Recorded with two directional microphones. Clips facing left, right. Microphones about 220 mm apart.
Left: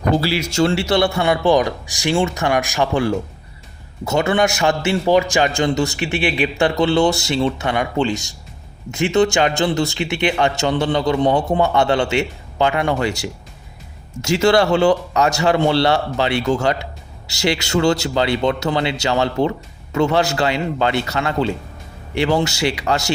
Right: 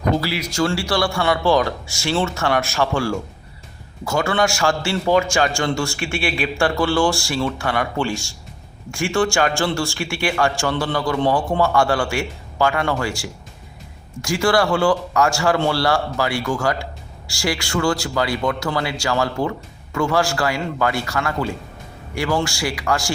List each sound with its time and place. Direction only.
0.1 s a man's voice: 30° left (ahead or behind)